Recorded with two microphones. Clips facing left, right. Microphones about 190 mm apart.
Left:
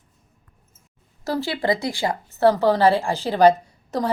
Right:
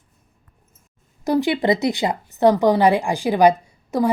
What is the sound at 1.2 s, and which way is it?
A woman's voice, 15° right (ahead or behind).